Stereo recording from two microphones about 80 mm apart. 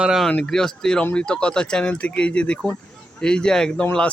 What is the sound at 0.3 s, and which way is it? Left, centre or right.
Speech, centre.